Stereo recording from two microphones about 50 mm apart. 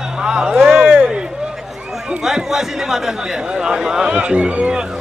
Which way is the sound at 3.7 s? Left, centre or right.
Centre.